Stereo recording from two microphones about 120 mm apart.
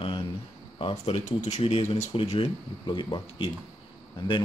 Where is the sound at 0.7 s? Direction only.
55° left (ahead or behind).